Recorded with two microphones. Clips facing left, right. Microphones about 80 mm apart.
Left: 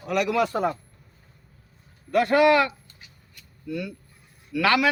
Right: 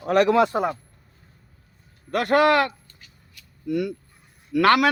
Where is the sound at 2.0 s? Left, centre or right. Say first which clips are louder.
Even; right.